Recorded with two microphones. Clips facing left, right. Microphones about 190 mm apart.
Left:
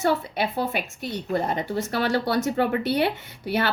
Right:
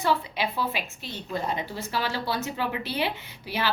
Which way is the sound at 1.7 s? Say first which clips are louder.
Left 6 dB; 60° left (ahead or behind).